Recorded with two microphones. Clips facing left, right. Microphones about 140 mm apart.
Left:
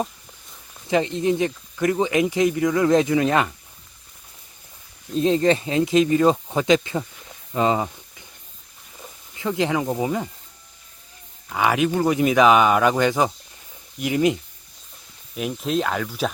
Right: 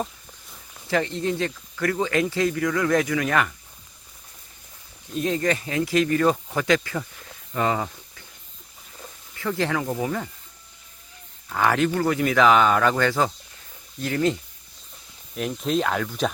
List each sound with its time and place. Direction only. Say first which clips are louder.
0.9 s speech: left 4 dB; 20° left (ahead or behind)
5.1 s speech: left 5 dB; 25° left (ahead or behind)
11.4 s speech: left 1 dB; 10° left (ahead or behind)
15.4 s speech: left 1 dB; 5° left (ahead or behind)